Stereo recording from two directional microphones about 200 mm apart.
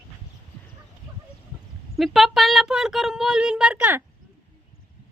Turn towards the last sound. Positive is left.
turn(degrees=-5)  # may be behind; listen again after turning